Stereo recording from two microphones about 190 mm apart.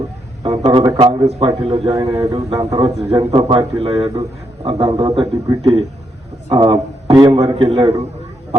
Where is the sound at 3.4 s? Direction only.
20° right (ahead or behind).